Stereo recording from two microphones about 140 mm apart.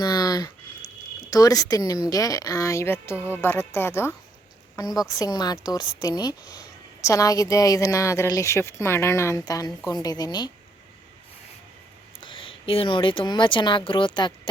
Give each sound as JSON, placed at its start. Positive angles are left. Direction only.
{"t": 0.0, "sound": "a sound", "side_deg": 30}
{"t": 1.3, "sound": "a woman's voice", "side_deg": 25}
{"t": 3.2, "sound": "speech", "side_deg": -15}
{"t": 3.4, "sound": "a woman's voice", "side_deg": 15}
{"t": 12.2, "sound": "speech", "side_deg": 40}